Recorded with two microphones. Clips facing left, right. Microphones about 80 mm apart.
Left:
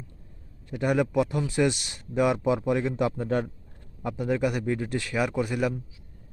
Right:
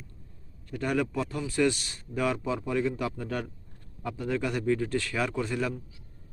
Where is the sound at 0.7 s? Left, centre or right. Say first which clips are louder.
Left 4 dB; centre.